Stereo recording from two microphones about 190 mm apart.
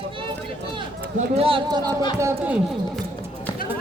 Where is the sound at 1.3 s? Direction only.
30° right (ahead or behind).